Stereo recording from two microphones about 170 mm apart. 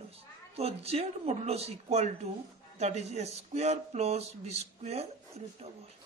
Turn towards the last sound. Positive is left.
turn(degrees=-40)  # may be behind; listen again after turning